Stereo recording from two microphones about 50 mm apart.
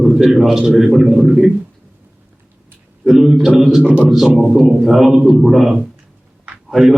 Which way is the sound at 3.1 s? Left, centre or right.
Centre.